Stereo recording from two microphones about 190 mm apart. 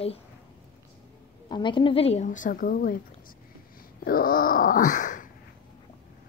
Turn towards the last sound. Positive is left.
turn(degrees=45)  # may be behind; listen again after turning